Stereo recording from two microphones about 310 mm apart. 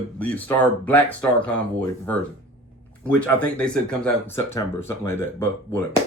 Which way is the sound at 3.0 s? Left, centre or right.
Centre.